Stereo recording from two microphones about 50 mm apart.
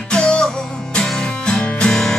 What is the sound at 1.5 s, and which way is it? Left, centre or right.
Music, centre.